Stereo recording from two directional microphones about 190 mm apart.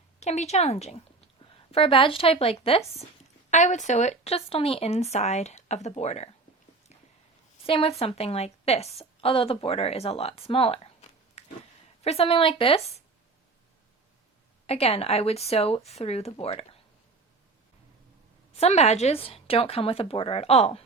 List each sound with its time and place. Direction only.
0.2 s speech: 35° left (ahead or behind)
7.7 s a woman's voice: 30° left (ahead or behind)
14.7 s speech: 30° left (ahead or behind)
18.5 s speech: 35° left (ahead or behind)